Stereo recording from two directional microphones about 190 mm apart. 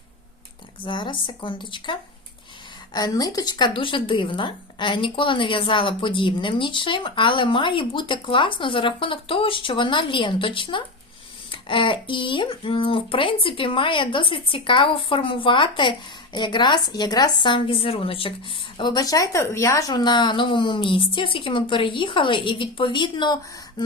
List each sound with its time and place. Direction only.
0.9 s speech: 25° left (ahead or behind)